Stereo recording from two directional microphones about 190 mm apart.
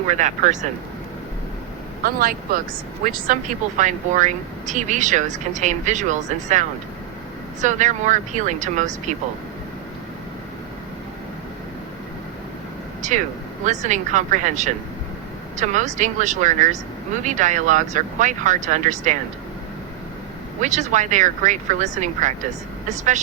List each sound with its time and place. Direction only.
0.1 s speech: 40° right (ahead or behind)
2.0 s speech: 50° right (ahead or behind)
13.0 s speech: 40° right (ahead or behind)
20.6 s speech: 40° right (ahead or behind)